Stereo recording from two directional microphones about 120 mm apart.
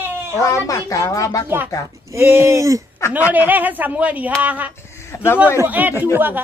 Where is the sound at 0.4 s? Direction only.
25° left (ahead or behind).